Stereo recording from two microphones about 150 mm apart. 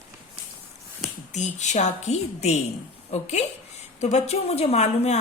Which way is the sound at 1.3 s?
50° left (ahead or behind).